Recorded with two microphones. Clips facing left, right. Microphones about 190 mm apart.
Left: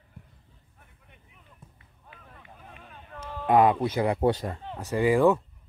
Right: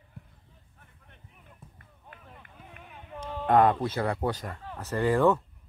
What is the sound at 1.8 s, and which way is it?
Run, 50° right (ahead or behind).